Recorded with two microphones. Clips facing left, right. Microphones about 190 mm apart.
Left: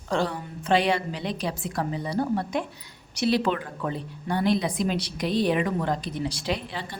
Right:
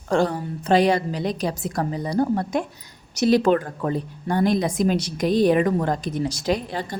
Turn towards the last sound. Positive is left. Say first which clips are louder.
# right 6 dB
turn(degrees=-45)  # may be behind; listen again after turning